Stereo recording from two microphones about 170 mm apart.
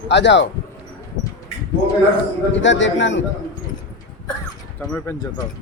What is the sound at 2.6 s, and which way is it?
Speech, 90° left.